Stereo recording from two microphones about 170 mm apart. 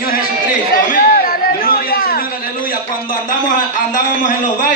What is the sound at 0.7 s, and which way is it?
Chatter, 60° left (ahead or behind).